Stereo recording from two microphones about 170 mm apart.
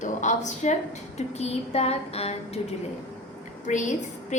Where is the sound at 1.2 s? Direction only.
40° left (ahead or behind).